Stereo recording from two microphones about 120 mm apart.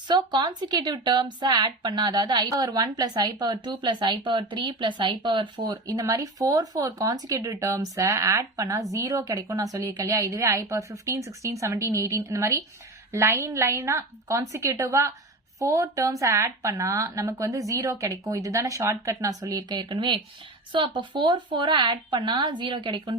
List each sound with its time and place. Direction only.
0.1 s a woman's voice: 35° right (ahead or behind)